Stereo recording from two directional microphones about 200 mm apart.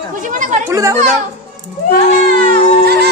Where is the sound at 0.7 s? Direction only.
15° right (ahead or behind).